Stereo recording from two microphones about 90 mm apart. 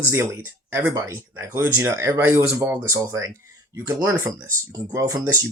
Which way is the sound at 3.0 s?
35° right (ahead or behind).